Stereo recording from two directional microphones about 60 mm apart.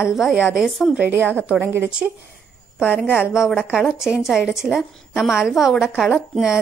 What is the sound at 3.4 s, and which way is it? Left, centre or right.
A woman's voice, centre.